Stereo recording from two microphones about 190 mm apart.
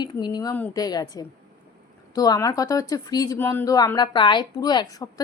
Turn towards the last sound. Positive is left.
turn(degrees=20)  # may be behind; listen again after turning